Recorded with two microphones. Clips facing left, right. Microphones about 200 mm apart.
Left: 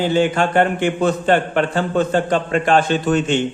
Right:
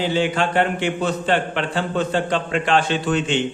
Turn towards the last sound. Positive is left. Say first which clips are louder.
# left 4 dB
turn(degrees=45)  # may be behind; listen again after turning